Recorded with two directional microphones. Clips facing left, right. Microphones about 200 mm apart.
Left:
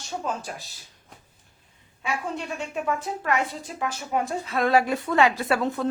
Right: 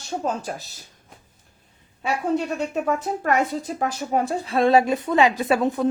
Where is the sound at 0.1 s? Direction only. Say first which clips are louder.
Right 4 dB; 40° right (ahead or behind).